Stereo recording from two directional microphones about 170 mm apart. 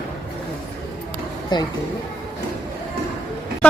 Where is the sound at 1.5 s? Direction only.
25° left (ahead or behind).